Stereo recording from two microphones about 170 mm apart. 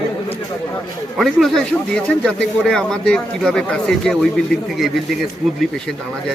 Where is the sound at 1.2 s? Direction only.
Centre (ahead or behind).